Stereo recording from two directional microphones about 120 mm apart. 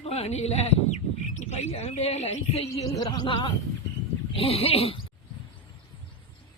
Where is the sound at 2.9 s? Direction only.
35° left (ahead or behind).